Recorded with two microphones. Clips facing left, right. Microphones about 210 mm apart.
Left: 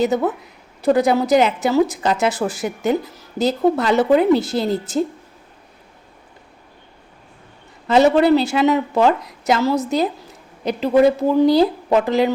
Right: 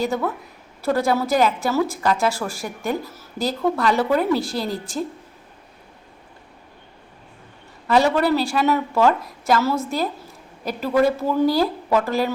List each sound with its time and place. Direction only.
0.0 s a woman's voice: 20° left (ahead or behind)
7.9 s a woman's voice: 20° left (ahead or behind)